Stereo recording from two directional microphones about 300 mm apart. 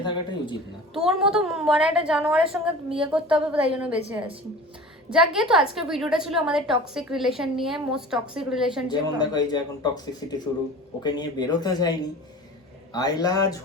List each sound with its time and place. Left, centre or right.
0.0 s a sound: centre
0.9 s a woman's voice: centre
8.9 s speech: centre